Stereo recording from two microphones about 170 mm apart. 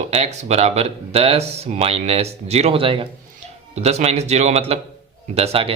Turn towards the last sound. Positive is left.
turn(degrees=-35)  # may be behind; listen again after turning